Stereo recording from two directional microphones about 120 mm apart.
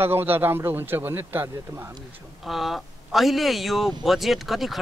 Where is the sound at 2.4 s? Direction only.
Centre (ahead or behind).